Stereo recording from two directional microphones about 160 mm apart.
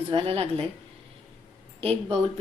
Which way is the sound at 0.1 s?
35° right (ahead or behind).